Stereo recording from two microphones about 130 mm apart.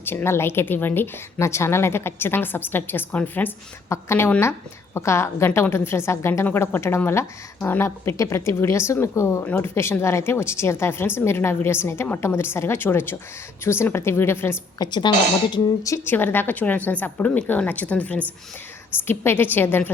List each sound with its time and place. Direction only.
0.0 s a woman's voice: 15° left (ahead or behind)
14.8 s a woman's voice: 35° left (ahead or behind)
15.5 s a woman's voice: 25° left (ahead or behind)